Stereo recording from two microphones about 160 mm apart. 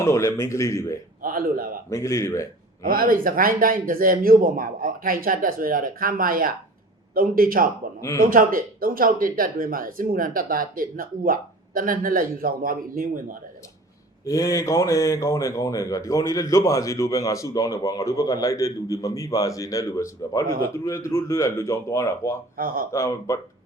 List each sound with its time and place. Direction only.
0.0 s speech: 20° left (ahead or behind)
1.2 s speech: 60° right (ahead or behind)
1.9 s speech: 20° left (ahead or behind)
2.8 s speech: 60° right (ahead or behind)
14.3 s speech: 20° left (ahead or behind)
22.5 s speech: 65° right (ahead or behind)
22.9 s speech: 15° left (ahead or behind)